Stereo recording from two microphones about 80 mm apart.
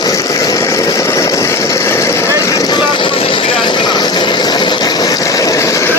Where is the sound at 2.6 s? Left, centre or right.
Left.